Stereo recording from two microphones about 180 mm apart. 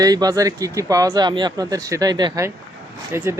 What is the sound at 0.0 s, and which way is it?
Speech, 20° right (ahead or behind).